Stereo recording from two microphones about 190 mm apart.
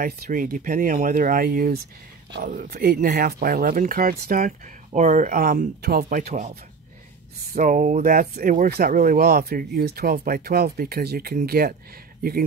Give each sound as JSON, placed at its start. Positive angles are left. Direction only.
{"t": 0.0, "sound": "speech", "side_deg": -45}
{"t": 7.5, "sound": "speech", "side_deg": -40}